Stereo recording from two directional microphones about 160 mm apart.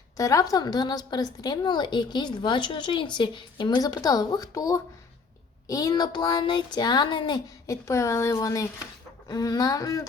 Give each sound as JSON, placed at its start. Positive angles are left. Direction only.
{"t": 0.2, "sound": "speech", "side_deg": 20}